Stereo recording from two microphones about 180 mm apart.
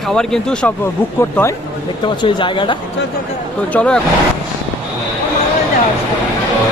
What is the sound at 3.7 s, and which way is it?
Speech, 5° left (ahead or behind).